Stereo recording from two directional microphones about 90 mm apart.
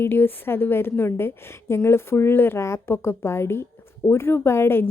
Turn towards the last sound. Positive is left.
turn(degrees=25)  # may be behind; listen again after turning